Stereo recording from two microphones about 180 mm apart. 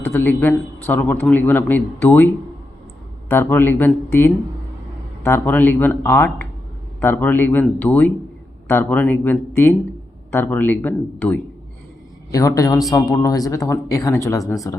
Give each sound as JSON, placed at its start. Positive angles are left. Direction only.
{"t": 0.0, "sound": "a man's voice", "side_deg": 15}